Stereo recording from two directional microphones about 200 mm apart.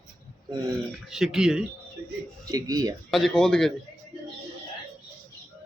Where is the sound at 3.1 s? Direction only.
Centre (ahead or behind).